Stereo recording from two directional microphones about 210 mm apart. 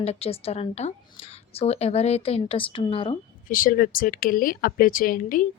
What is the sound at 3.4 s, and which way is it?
Speech, 40° left (ahead or behind).